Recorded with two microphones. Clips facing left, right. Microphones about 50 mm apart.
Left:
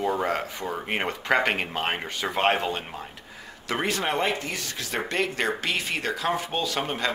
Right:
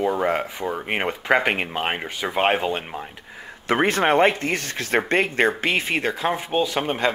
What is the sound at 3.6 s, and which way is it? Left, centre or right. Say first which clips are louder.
Speech: right 7 dB; right.